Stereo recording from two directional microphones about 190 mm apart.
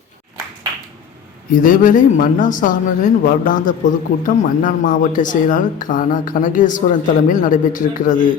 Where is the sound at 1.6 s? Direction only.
45° left (ahead or behind).